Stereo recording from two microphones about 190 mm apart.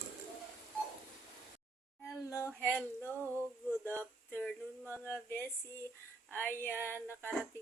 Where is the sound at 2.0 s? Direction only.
15° left (ahead or behind).